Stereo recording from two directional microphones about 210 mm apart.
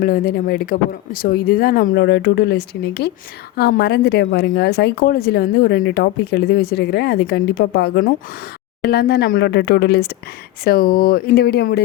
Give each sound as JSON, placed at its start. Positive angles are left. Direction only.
{"t": 0.0, "sound": "speech", "side_deg": 45}